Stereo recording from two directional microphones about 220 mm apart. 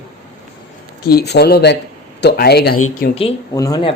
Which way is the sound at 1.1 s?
45° left (ahead or behind).